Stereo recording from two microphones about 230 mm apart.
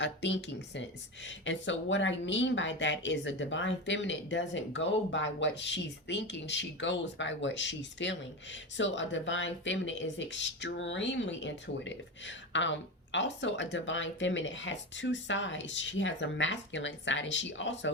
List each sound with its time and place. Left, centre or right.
0.0 s speech: left